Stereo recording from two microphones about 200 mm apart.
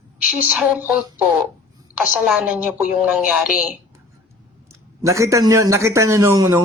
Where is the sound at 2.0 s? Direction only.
5° right (ahead or behind).